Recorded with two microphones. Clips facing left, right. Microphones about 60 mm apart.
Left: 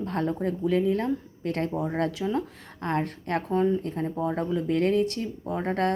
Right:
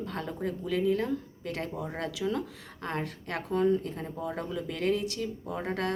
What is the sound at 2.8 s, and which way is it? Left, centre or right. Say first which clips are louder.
Speech: left 6 dB; left.